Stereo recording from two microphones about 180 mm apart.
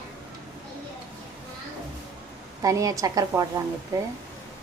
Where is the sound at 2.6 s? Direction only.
20° right (ahead or behind).